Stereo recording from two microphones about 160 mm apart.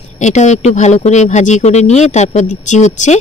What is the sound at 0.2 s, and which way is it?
Speech, 45° left (ahead or behind).